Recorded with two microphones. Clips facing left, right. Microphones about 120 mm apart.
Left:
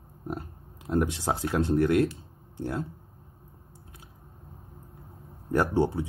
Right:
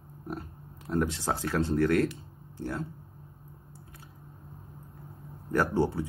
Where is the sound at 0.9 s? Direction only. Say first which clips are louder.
Left 2 dB; 25° left (ahead or behind).